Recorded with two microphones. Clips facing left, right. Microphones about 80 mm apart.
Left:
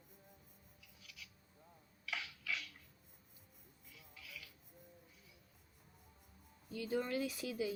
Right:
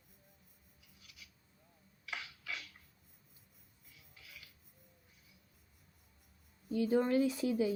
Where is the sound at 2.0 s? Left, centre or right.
Right.